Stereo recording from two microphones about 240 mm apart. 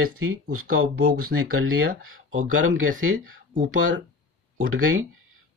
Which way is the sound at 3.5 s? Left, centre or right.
Right.